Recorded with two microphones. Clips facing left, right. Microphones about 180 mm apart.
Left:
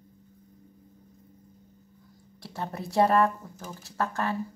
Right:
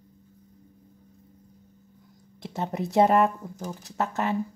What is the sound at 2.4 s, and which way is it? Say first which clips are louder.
Speech: right 5 dB; 20° right (ahead or behind).